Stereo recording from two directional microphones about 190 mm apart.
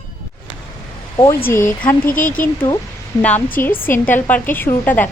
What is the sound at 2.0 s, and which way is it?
Speech, 45° left (ahead or behind).